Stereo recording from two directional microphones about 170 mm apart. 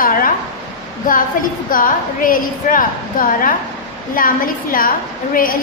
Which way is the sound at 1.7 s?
55° left (ahead or behind).